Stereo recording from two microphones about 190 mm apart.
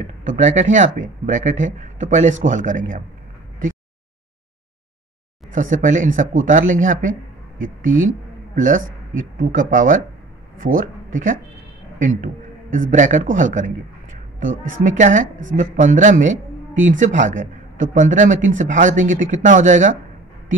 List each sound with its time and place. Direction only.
0.4 s speech: 40° right (ahead or behind)
5.5 s speech: 40° right (ahead or behind)
8.5 s speech: 45° right (ahead or behind)